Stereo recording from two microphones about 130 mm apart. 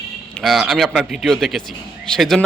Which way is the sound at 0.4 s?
Centre (ahead or behind).